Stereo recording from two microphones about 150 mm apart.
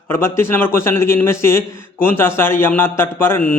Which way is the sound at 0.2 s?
15° left (ahead or behind).